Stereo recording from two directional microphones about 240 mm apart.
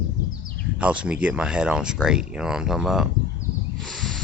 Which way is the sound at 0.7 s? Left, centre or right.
Centre.